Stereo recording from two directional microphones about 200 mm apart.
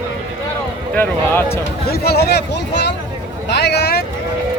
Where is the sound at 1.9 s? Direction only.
55° left (ahead or behind).